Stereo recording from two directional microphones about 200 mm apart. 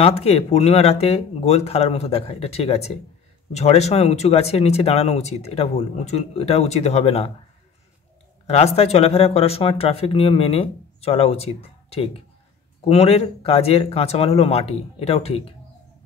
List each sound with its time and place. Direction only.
0.0 s speech: 30° left (ahead or behind)
8.5 s speech: 30° left (ahead or behind)